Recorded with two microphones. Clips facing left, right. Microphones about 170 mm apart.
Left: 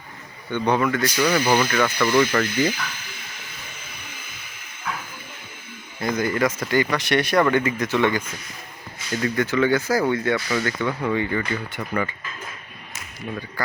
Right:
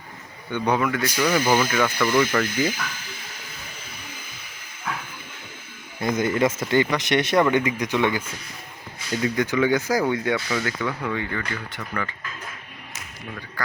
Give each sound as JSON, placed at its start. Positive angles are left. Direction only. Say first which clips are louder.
{"t": 0.5, "sound": "speech", "louder": "left 2 dB", "side_deg": -10}
{"t": 6.0, "sound": "speech", "louder": "right 1 dB", "side_deg": -20}
{"t": 9.2, "sound": "speech", "louder": "left 1 dB", "side_deg": -15}
{"t": 10.5, "sound": "speech", "louder": "left 2 dB", "side_deg": 0}